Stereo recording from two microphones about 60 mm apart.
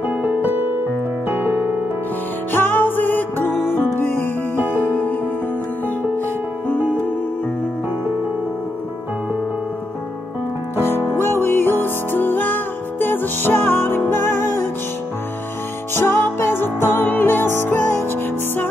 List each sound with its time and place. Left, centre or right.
0.0 s music: right
1.3 s piano: right
2.5 s music: left
6.7 s music: left
11.1 s music: left
15.9 s music: left